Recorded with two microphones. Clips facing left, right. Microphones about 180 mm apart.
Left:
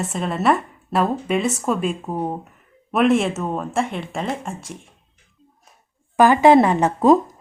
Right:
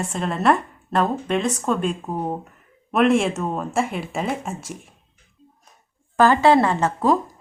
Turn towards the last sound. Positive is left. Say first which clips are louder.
# left 5 dB
turn(degrees=20)  # may be behind; listen again after turning